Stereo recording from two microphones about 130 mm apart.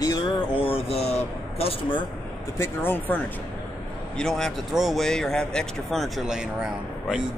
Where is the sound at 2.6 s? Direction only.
15° left (ahead or behind).